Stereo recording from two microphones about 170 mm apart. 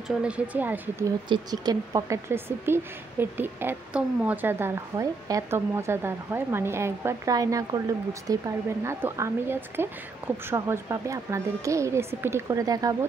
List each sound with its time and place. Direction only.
0.1 s a woman's voice: 5° right (ahead or behind)
1.3 s a woman's voice: 25° right (ahead or behind)